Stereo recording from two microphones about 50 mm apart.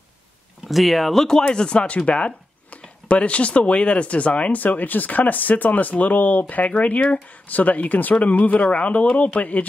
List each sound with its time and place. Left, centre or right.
0.7 s speech: centre; by 9.7 s left